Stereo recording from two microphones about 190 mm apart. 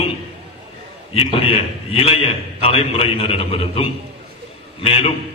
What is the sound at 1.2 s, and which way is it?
A man's voice, 30° left (ahead or behind).